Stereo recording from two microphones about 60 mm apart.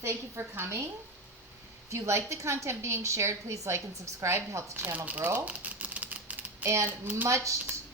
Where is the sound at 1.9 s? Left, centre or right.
Right.